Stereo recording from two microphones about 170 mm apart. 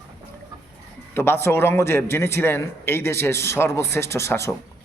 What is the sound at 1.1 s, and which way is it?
A man's voice, 15° left (ahead or behind).